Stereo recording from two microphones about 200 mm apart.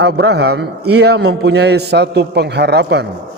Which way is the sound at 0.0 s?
55° right (ahead or behind).